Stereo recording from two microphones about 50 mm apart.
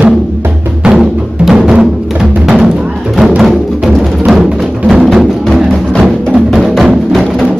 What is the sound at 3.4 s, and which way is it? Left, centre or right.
Music, centre.